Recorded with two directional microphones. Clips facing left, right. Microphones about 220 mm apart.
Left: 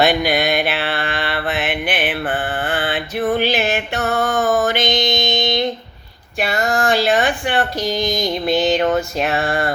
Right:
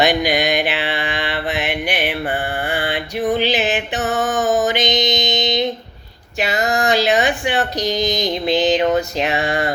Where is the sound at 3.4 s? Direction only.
20° right (ahead or behind).